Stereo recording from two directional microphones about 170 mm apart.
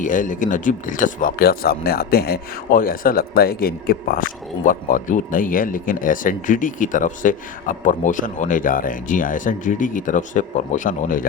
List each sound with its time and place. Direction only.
0.0 s speech: 50° left (ahead or behind)